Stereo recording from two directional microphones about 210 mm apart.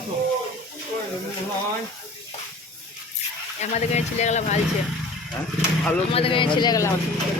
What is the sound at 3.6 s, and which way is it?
Speech, 30° left (ahead or behind).